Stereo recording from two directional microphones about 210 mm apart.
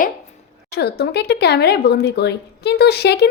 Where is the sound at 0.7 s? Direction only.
50° left (ahead or behind).